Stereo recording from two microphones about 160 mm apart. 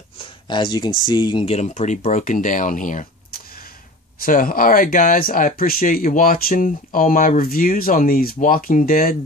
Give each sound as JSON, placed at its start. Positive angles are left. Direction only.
{"t": 0.2, "sound": "speech", "side_deg": 30}
{"t": 4.2, "sound": "speech", "side_deg": 60}